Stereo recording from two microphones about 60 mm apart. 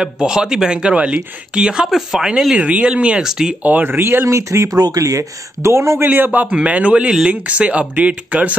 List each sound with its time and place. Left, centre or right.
0.0 s speech: centre
2.5 s speech: centre
3.6 s speech: right
4.7 s speech: right
6.0 s speech: right
6.4 s speech: right